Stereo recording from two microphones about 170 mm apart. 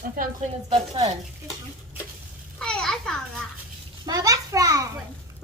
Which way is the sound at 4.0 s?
20° right (ahead or behind).